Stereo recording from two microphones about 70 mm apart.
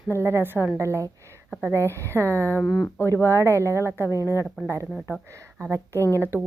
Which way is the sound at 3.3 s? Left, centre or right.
Right.